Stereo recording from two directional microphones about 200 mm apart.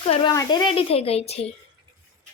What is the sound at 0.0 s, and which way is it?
A child's voice, 25° left (ahead or behind).